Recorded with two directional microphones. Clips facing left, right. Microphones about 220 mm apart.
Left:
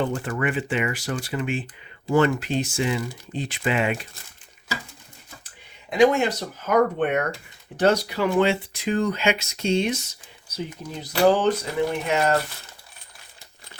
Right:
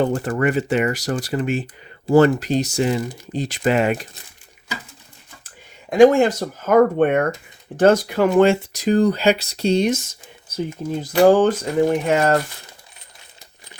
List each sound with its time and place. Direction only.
0.0 s speech: 40° right (ahead or behind)
5.9 s speech: 50° right (ahead or behind)